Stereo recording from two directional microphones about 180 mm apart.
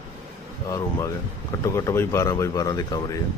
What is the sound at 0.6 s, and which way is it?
Speech, 20° left (ahead or behind).